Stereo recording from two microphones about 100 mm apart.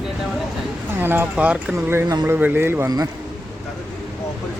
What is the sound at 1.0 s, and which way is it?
Speech, 20° right (ahead or behind).